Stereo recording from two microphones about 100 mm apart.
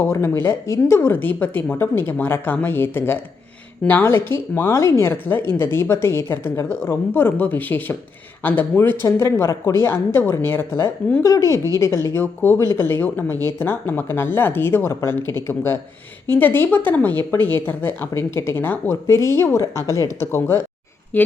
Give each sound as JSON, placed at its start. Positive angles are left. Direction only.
{"t": 0.1, "sound": "speech", "side_deg": 25}